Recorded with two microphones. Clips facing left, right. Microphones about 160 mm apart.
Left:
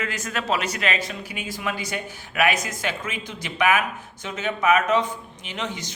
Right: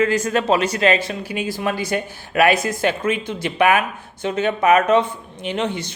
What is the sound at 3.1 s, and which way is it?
Speech, 60° right (ahead or behind).